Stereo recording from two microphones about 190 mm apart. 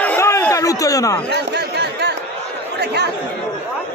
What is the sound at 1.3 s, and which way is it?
Chatter, 60° right (ahead or behind).